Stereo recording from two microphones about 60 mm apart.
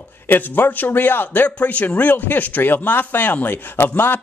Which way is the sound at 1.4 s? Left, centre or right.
Left.